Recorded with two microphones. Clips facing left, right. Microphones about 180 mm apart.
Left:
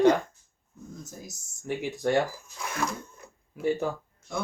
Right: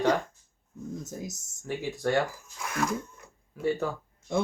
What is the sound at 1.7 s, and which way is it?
Speech, 20° left (ahead or behind).